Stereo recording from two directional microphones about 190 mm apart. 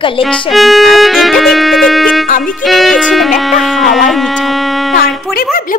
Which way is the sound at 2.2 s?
45° left (ahead or behind).